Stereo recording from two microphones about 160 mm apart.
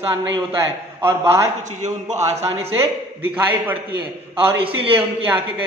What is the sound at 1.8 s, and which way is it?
Speech, 45° right (ahead or behind).